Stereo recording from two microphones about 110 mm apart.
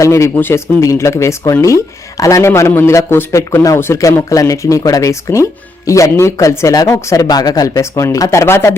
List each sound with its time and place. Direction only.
0.0 s speech: 25° left (ahead or behind)